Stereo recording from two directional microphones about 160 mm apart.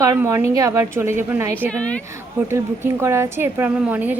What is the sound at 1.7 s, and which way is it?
Speech, 5° left (ahead or behind).